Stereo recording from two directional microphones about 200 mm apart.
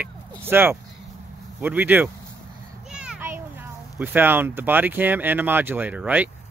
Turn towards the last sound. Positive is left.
turn(degrees=-5)  # may be behind; listen again after turning